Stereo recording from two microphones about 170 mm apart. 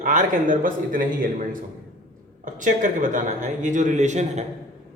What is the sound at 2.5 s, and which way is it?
A man's voice, 50° right (ahead or behind).